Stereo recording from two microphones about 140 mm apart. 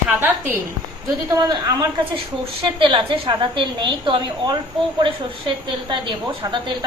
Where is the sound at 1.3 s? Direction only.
25° right (ahead or behind).